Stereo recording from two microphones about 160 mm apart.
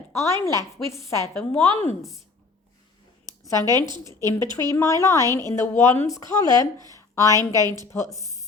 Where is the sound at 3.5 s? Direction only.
25° right (ahead or behind).